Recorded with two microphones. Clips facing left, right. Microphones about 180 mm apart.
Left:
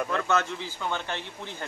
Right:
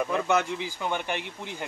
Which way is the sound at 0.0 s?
15° right (ahead or behind).